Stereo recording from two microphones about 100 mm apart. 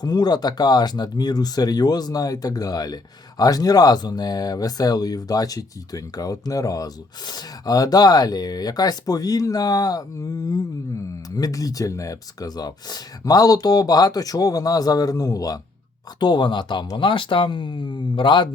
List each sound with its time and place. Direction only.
0.0 s speech: 45° left (ahead or behind)
11.3 s speech: 40° left (ahead or behind)
16.2 s speech: 50° left (ahead or behind)